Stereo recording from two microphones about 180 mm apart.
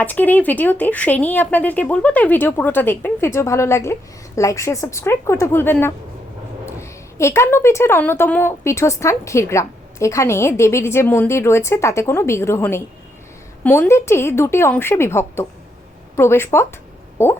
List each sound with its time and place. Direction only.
0.0 s speech: 10° left (ahead or behind)